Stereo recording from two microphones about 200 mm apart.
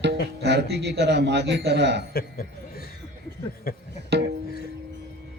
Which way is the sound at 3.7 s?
50° left (ahead or behind).